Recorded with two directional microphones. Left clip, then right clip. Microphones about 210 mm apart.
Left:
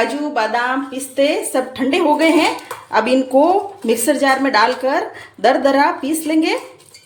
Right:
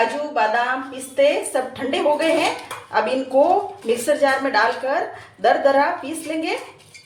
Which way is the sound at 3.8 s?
55° left (ahead or behind).